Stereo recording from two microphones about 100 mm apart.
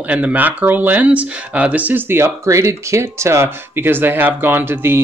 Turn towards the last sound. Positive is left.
turn(degrees=-20)  # may be behind; listen again after turning